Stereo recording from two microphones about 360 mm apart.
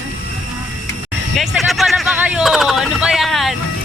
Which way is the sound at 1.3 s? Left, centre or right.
Centre.